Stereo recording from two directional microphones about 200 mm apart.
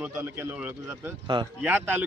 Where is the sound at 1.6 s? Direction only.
10° right (ahead or behind).